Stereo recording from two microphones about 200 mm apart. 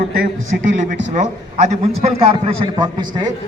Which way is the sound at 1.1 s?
35° right (ahead or behind).